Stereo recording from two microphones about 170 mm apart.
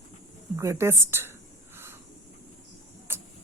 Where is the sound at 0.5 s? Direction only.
15° right (ahead or behind).